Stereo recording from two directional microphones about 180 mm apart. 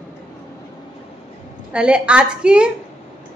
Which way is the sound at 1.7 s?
5° right (ahead or behind).